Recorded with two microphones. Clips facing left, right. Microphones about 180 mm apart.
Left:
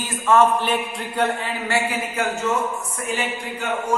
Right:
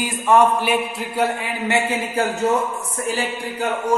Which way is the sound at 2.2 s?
30° right (ahead or behind).